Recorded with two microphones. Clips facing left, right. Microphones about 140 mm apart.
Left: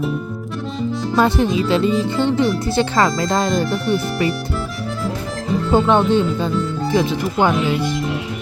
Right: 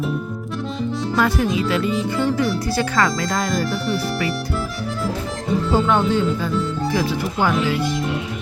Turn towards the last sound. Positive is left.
turn(degrees=20)  # may be behind; listen again after turning